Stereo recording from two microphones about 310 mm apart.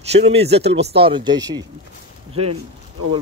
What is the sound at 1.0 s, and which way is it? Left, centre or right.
Speech, centre.